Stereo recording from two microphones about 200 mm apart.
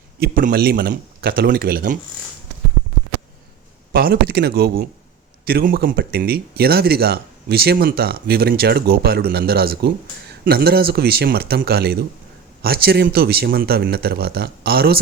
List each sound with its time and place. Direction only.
0.2 s speech: 45° right (ahead or behind)
3.9 s speech: 50° right (ahead or behind)